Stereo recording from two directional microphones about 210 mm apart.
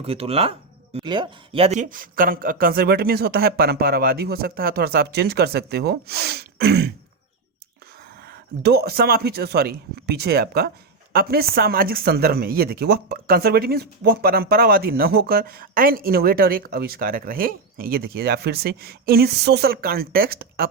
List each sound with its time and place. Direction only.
0.0 s speech: 30° right (ahead or behind); by 6.9 s 50° right (ahead or behind)
8.3 s speech: 50° right (ahead or behind)